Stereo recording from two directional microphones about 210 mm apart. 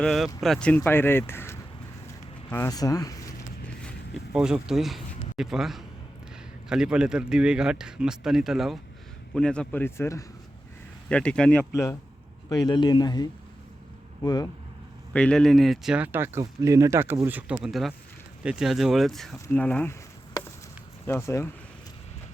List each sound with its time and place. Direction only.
0.0 s a man's voice: centre (ahead or behind)
4.4 s a man's voice: 5° right (ahead or behind); by 14.5 s 15° left (ahead or behind)
15.1 s a man's voice: 5° left (ahead or behind)